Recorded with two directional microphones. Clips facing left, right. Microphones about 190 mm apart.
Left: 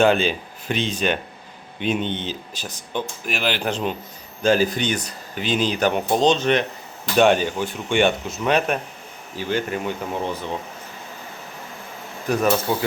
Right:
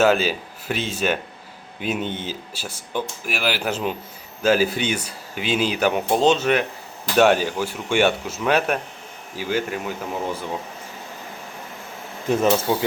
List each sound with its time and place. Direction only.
0.0 s speech: 5° right (ahead or behind)
12.2 s speech: 25° right (ahead or behind)